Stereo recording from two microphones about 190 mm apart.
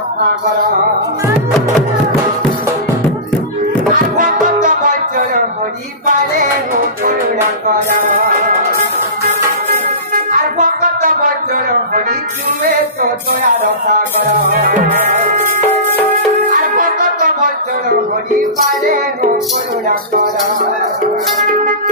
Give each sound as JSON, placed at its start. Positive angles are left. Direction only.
{"t": 4.2, "sound": "music", "side_deg": -45}
{"t": 10.3, "sound": "music", "side_deg": -45}
{"t": 14.5, "sound": "music", "side_deg": -40}